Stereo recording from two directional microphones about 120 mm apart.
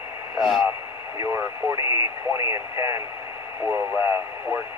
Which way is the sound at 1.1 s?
25° right (ahead or behind).